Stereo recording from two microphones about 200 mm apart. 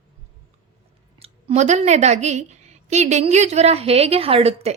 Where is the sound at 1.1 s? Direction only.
30° right (ahead or behind).